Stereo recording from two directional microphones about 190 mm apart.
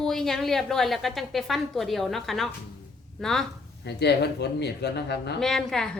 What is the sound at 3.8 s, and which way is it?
Speech, 60° left (ahead or behind).